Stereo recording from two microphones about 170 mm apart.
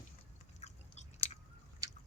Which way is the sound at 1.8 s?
20° right (ahead or behind).